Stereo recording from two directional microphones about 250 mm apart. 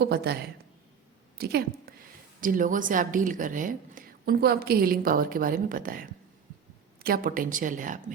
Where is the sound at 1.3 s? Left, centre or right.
Right.